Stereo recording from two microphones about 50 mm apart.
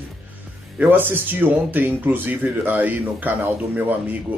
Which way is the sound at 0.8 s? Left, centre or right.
Right.